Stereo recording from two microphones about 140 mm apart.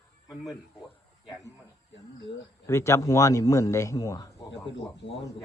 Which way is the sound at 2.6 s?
20° left (ahead or behind).